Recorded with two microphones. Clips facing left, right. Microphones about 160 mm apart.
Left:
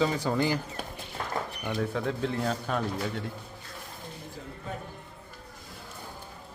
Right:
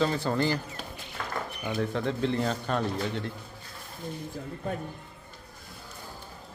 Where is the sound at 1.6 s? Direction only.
Centre (ahead or behind).